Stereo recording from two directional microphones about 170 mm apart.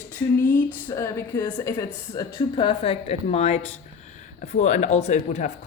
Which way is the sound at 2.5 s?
30° left (ahead or behind).